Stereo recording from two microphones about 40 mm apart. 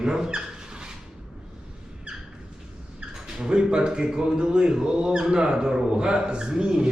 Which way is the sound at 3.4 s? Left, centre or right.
Right.